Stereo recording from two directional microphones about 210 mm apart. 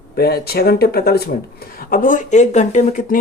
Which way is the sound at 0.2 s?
45° left (ahead or behind).